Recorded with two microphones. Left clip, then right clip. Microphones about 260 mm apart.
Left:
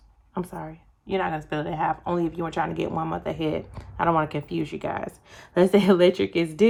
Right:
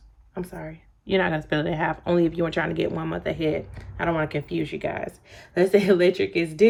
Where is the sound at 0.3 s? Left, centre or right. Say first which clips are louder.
Left 1 dB; centre.